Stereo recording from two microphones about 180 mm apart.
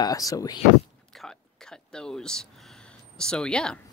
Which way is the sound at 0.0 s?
20° left (ahead or behind).